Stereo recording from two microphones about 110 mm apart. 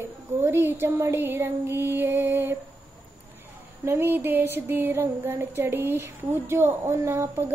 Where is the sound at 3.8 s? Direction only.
20° right (ahead or behind).